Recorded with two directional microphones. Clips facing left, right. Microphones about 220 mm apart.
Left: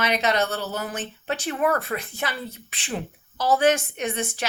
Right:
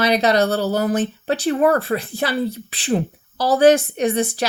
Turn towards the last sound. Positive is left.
turn(degrees=-35)  # may be behind; listen again after turning